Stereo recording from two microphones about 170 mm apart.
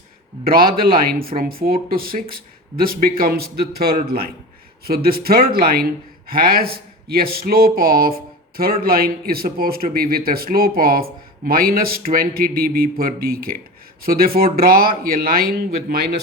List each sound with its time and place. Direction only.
0.4 s speech: 60° right (ahead or behind)